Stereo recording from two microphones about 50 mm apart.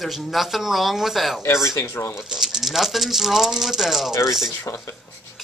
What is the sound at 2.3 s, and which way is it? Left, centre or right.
Speech, centre.